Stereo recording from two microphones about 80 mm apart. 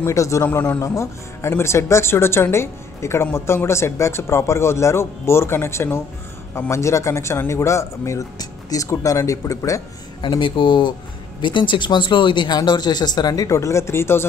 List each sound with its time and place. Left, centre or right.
0.0 s a man's voice: left
0.5 s speech: left
0.7 s a man's voice: left
8.4 s speech: left
10.2 s speech: left
11.4 s speech: left